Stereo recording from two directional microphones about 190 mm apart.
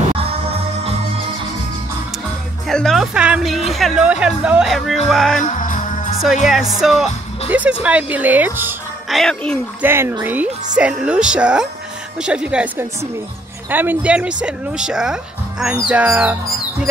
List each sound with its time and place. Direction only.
0.2 s music: 30° right (ahead or behind)
2.7 s speech: centre (ahead or behind)
5.4 s music: 45° left (ahead or behind)
6.4 s speech: centre (ahead or behind)
9.1 s speech: 5° left (ahead or behind)
9.8 s speech: 10° right (ahead or behind)